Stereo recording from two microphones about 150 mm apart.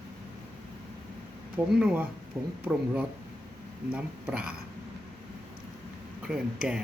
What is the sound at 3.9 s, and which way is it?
Speech, 10° right (ahead or behind).